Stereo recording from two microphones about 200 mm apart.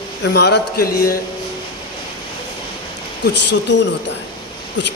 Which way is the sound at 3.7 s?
65° left (ahead or behind).